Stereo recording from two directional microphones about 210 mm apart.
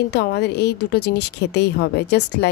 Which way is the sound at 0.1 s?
50° left (ahead or behind).